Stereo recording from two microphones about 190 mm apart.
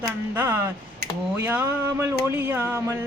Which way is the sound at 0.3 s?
10° right (ahead or behind).